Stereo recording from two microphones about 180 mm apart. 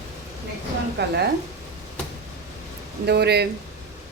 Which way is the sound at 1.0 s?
65° right (ahead or behind).